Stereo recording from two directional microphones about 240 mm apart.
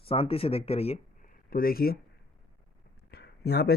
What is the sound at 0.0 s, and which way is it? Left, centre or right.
Speech, left.